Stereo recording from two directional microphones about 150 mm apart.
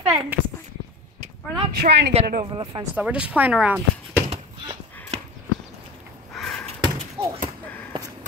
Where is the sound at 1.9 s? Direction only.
60° right (ahead or behind).